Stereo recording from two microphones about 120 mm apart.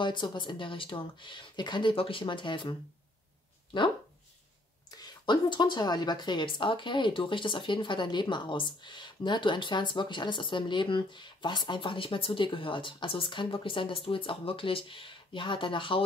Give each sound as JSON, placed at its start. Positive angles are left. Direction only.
{"t": 0.0, "sound": "speech", "side_deg": 40}
{"t": 3.7, "sound": "speech", "side_deg": 45}
{"t": 4.9, "sound": "a woman's voice", "side_deg": 35}